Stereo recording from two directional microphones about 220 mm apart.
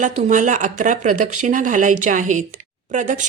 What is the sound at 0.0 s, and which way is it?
A woman's voice, 35° right (ahead or behind).